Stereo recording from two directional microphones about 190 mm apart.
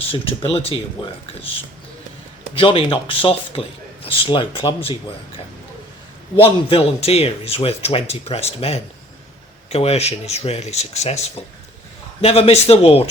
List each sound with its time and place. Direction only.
0.1 s a man's voice: 30° left (ahead or behind)
2.6 s a man's voice: 30° left (ahead or behind)
6.4 s a man's voice: 30° left (ahead or behind)